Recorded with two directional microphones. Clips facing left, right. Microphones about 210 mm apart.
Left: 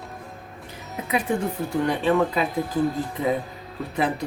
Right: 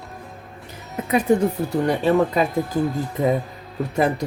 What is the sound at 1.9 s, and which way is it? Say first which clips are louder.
Speech: right 3 dB; 45° right (ahead or behind).